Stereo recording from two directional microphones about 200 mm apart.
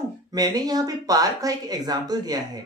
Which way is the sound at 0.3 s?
20° right (ahead or behind).